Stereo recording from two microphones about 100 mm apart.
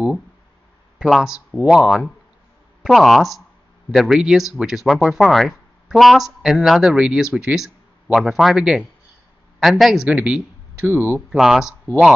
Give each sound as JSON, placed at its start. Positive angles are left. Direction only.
{"t": 0.9, "sound": "a man's voice", "side_deg": -5}
{"t": 10.9, "sound": "speech", "side_deg": -25}
{"t": 11.3, "sound": "speech", "side_deg": -5}